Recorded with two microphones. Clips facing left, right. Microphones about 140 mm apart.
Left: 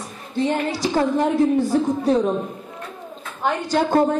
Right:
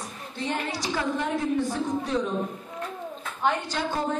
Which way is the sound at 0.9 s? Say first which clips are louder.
Left 8 dB; 40° left (ahead or behind).